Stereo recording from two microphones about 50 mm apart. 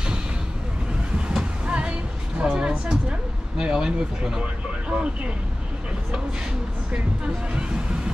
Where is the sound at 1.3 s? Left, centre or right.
Right.